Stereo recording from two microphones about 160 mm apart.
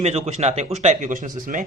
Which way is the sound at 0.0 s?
40° right (ahead or behind).